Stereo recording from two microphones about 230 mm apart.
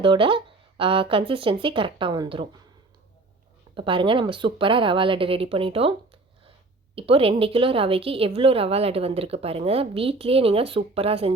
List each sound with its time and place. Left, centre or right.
0.0 s a woman's voice: right
3.8 s a woman's voice: right